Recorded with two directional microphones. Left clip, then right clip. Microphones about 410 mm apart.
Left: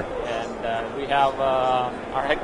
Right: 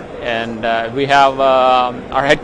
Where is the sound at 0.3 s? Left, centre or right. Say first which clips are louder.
Right 13 dB; right.